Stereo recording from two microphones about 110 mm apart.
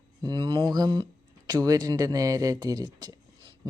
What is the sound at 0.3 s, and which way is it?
Speech, 45° right (ahead or behind).